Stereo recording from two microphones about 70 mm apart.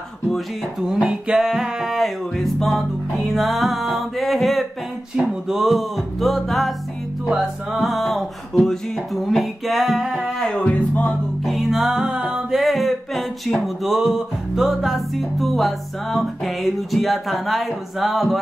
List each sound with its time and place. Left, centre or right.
1.0 s music: centre
10.4 s music: centre
11.4 s music: centre
12.5 s a sound: centre